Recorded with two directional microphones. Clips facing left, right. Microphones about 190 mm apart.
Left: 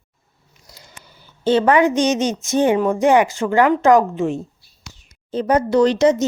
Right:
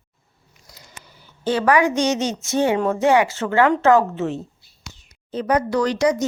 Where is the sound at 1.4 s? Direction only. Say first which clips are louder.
Left 3 dB; 25° left (ahead or behind).